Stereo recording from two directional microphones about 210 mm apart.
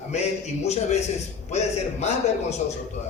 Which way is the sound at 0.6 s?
30° left (ahead or behind).